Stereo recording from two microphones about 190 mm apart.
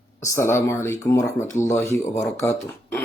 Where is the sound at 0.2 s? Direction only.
15° left (ahead or behind).